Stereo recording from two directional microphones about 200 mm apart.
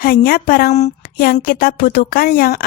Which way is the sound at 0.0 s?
45° left (ahead or behind).